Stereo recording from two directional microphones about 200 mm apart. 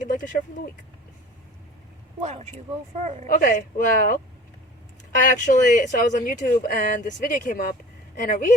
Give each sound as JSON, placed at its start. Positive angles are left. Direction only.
{"t": 0.0, "sound": "speech", "side_deg": 40}
{"t": 2.2, "sound": "speech", "side_deg": -35}
{"t": 3.2, "sound": "speech", "side_deg": 45}
{"t": 5.2, "sound": "speech", "side_deg": 40}